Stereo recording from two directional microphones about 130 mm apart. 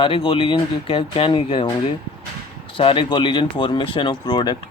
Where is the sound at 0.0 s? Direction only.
45° left (ahead or behind).